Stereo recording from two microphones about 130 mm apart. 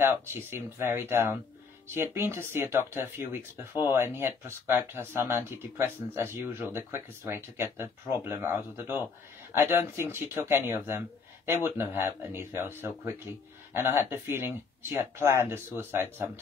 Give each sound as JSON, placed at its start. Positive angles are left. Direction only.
{"t": 0.0, "sound": "speech", "side_deg": -20}